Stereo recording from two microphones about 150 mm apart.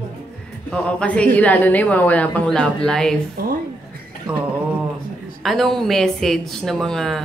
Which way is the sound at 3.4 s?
80° right.